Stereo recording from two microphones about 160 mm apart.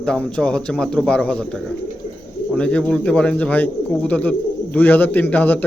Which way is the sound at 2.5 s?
5° left (ahead or behind).